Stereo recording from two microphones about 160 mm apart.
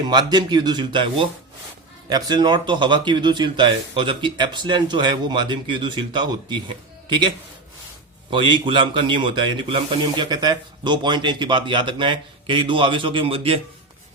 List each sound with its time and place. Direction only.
0.0 s a man's voice: 25° right (ahead or behind)